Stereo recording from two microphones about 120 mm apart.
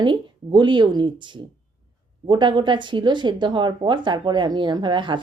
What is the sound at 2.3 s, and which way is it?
Speech, 40° right (ahead or behind).